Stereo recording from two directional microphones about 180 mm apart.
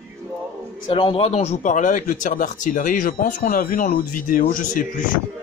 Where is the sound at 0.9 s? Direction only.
30° left (ahead or behind); by 4.9 s 50° left (ahead or behind).